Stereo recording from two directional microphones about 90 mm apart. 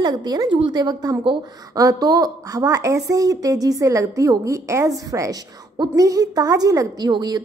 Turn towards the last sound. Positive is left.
turn(degrees=-50)  # may be behind; listen again after turning